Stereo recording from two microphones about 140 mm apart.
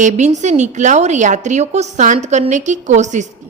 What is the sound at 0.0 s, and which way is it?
Speech, 60° right (ahead or behind).